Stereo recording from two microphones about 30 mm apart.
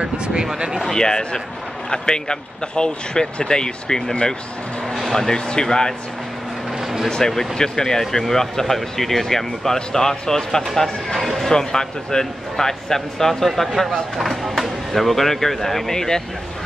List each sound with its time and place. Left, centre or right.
0.0 s speech: right
0.9 s speech: left
5.1 s speech: centre
7.1 s speech: centre
9.8 s speech: centre
11.1 s a sound: centre
11.5 s speech: left